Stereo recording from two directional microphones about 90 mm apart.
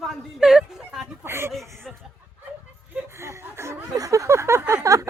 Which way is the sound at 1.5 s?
Centre (ahead or behind).